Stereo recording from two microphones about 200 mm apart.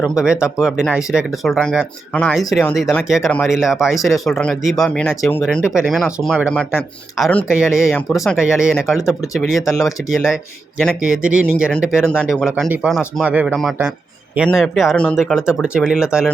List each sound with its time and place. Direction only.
0.6 s speech: centre (ahead or behind)
9.6 s speech: 15° left (ahead or behind)
9.8 s speech: centre (ahead or behind)